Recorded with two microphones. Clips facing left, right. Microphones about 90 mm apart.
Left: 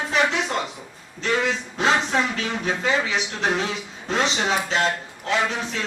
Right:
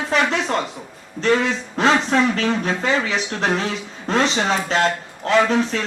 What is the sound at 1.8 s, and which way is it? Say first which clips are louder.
Speech: right 5 dB; 50° right (ahead or behind).